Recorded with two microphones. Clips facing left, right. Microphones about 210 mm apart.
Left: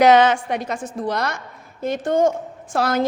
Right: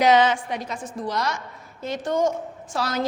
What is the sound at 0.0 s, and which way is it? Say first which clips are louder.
A woman's voice: left 4 dB; 65° left (ahead or behind).